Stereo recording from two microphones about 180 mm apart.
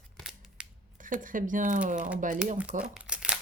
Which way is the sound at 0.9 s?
50° right (ahead or behind).